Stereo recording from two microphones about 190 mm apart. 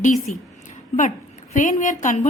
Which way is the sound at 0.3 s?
40° left (ahead or behind).